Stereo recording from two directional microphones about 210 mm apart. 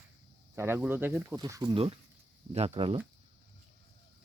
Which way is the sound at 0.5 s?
10° right (ahead or behind).